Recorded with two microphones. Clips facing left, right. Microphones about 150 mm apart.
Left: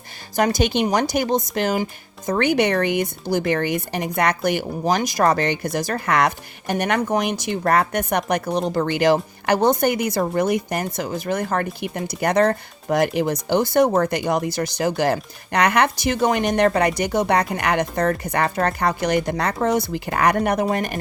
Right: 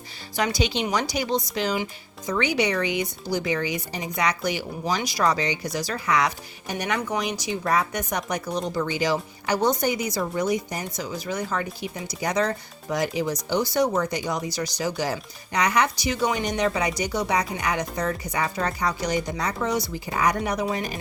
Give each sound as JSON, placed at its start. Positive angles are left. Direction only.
{"t": 0.3, "sound": "speech", "side_deg": 50}